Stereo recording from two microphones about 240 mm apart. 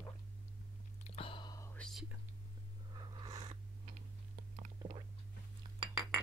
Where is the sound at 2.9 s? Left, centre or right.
Centre.